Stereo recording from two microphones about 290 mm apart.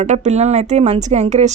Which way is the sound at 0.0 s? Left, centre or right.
Right.